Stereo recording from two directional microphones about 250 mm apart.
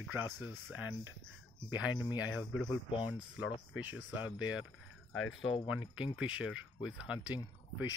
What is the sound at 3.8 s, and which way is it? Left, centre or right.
Speech, centre.